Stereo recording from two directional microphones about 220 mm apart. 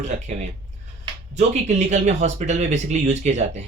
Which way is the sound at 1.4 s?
30° right (ahead or behind).